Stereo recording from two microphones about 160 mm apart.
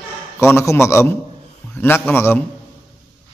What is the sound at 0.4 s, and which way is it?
Speech, 15° left (ahead or behind).